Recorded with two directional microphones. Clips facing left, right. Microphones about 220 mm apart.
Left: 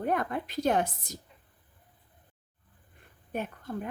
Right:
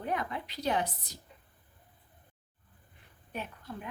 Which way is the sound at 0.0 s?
50° left (ahead or behind).